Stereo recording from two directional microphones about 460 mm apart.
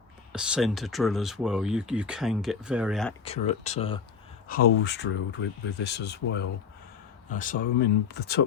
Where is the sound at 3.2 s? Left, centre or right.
Centre.